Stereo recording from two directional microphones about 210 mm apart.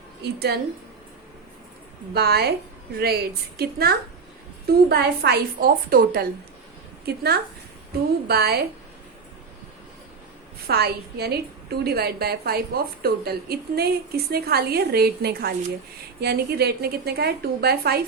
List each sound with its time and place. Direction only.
0.2 s a woman's voice: 50° right (ahead or behind)
2.1 s a woman's voice: 50° right (ahead or behind)
3.6 s a woman's voice: 50° right (ahead or behind)
10.7 s a woman's voice: 50° right (ahead or behind)